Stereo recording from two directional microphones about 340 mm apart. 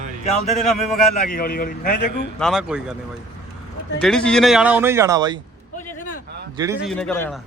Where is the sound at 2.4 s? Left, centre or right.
Centre.